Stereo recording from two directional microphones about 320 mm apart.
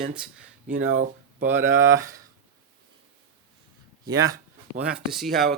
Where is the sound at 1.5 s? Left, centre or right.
Centre.